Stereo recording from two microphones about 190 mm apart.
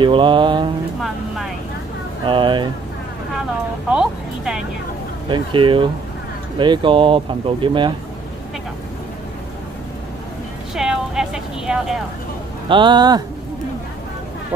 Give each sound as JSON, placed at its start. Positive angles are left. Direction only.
{"t": 0.0, "sound": "speech", "side_deg": -25}
{"t": 1.0, "sound": "speech", "side_deg": 0}
{"t": 2.2, "sound": "speech", "side_deg": -25}
{"t": 3.9, "sound": "speech", "side_deg": -5}
{"t": 5.3, "sound": "speech", "side_deg": -25}
{"t": 10.7, "sound": "speech", "side_deg": 0}
{"t": 12.6, "sound": "speech", "side_deg": -25}